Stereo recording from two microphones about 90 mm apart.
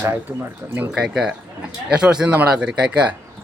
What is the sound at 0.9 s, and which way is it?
Speech, 5° right (ahead or behind).